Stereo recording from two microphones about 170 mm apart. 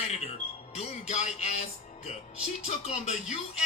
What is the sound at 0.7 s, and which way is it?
Speech, 40° left (ahead or behind).